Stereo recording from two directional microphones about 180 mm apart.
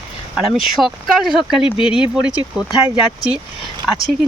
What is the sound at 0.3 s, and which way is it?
Speech, centre (ahead or behind).